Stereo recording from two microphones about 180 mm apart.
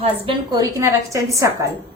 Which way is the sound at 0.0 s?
30° right (ahead or behind).